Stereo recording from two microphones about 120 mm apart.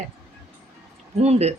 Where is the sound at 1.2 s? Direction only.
65° right (ahead or behind).